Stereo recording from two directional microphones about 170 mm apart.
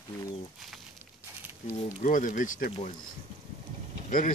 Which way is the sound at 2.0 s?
50° left (ahead or behind).